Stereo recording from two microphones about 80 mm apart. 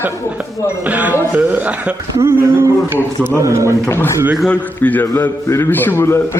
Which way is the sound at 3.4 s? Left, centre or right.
Right.